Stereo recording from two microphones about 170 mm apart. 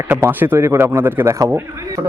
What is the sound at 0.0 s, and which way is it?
Speech, 15° right (ahead or behind).